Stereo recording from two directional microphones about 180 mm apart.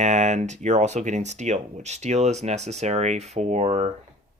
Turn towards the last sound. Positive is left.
turn(degrees=-40)  # may be behind; listen again after turning